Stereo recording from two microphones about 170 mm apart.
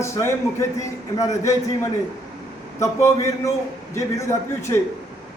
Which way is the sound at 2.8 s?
15° left (ahead or behind).